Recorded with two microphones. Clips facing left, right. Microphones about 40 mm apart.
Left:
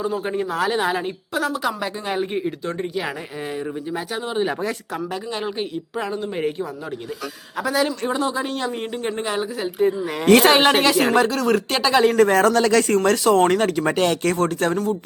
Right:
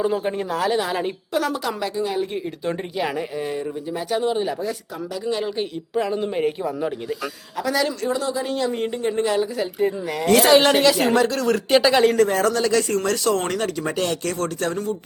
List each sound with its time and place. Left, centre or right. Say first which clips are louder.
0.3 s speech: even; centre
2.6 s speech: right 1 dB; centre
3.9 s speech: right 4 dB; centre
7.6 s speech: left 1 dB; centre
8.0 s speech: left 1 dB; left
9.1 s speech: right 3 dB; centre
10.2 s speech: left 1 dB; left; by 12.1 s centre
12.1 s speech: left 3 dB; left
13.0 s speech: left 5 dB; left
13.6 s speech: left 4 dB; left
14.3 s speech: left 4 dB; left